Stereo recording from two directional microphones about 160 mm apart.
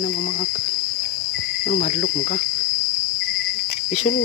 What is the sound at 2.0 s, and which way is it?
Cricket, 85° left.